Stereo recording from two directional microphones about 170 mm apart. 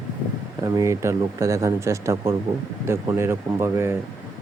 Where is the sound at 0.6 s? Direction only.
20° right (ahead or behind).